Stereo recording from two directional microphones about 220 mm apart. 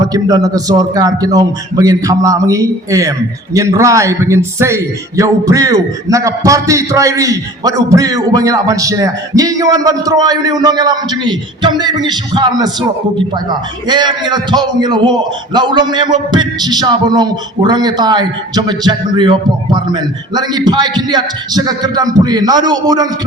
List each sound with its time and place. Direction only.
0.0 s a man's voice: 15° right (ahead or behind)